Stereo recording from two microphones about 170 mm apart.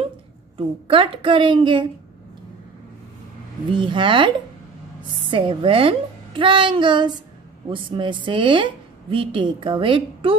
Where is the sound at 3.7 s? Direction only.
30° right (ahead or behind).